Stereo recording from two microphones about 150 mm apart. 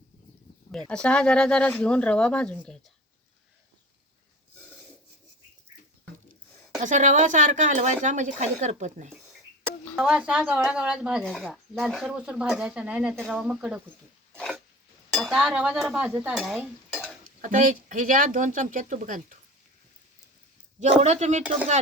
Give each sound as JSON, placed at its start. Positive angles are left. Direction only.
{"t": 0.7, "sound": "speech", "side_deg": 5}
{"t": 6.8, "sound": "speech", "side_deg": -55}
{"t": 9.9, "sound": "speech", "side_deg": -5}
{"t": 14.3, "sound": "dog", "side_deg": 0}
{"t": 15.1, "sound": "speech", "side_deg": 0}
{"t": 16.9, "sound": "stir", "side_deg": 0}
{"t": 17.4, "sound": "speech", "side_deg": -60}
{"t": 20.7, "sound": "speech", "side_deg": -50}